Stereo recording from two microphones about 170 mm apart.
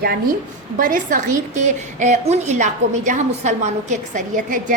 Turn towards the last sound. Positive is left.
turn(degrees=-50)  # may be behind; listen again after turning